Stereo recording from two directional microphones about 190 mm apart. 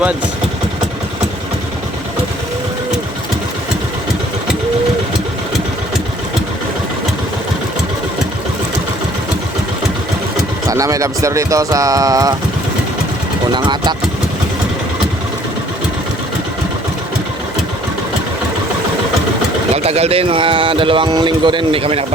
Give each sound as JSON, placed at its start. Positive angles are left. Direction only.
{"t": 10.7, "sound": "speech", "side_deg": -15}
{"t": 13.5, "sound": "speech", "side_deg": -25}
{"t": 19.7, "sound": "speech", "side_deg": -35}